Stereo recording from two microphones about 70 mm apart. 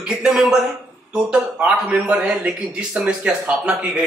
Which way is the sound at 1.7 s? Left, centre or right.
Centre.